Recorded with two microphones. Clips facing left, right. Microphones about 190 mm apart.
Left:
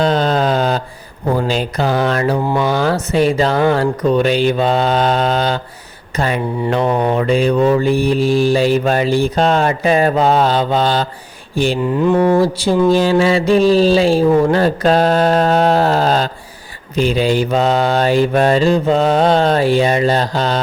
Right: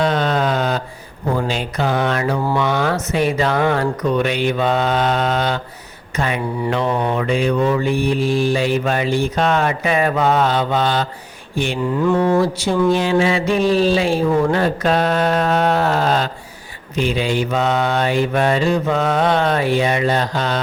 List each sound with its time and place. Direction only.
0.0 s a sound: 35° left (ahead or behind)
1.4 s mantra: 35° left (ahead or behind)
11.9 s mantra: 20° left (ahead or behind)
12.4 s mantra: 30° left (ahead or behind)